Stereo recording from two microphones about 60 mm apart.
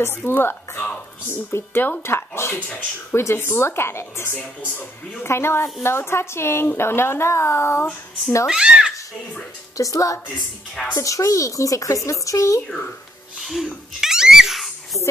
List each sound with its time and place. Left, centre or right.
0.0 s a woman's voice: left
4.4 s a woman's voice: left
8.5 s a child's voice: centre
9.8 s speech: left
13.4 s sneeze: centre